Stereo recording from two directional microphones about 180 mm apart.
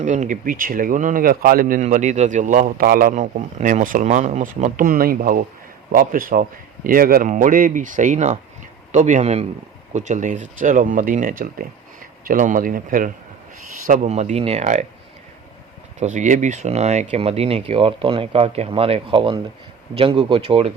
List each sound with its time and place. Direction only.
0.0 s speech: 45° right (ahead or behind)
16.0 s speech: 40° right (ahead or behind)